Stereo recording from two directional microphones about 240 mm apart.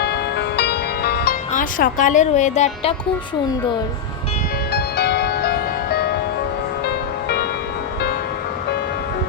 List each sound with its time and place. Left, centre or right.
0.0 s music: left
4.7 s music: left